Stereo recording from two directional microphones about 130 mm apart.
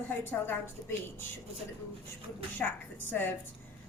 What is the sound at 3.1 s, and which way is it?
Speech, 15° left (ahead or behind).